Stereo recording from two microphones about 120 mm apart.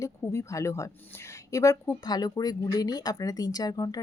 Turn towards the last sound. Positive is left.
turn(degrees=30)  # may be behind; listen again after turning